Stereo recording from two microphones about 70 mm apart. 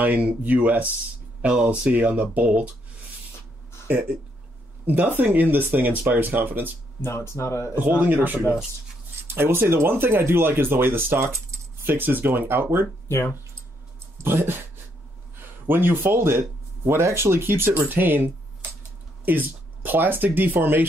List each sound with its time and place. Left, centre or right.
0.0 s speech: right
3.8 s speech: right
7.0 s speech: left
8.0 s speech: right
14.1 s speech: right